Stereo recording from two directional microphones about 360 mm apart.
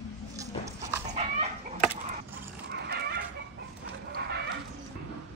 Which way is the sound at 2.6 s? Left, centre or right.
Right.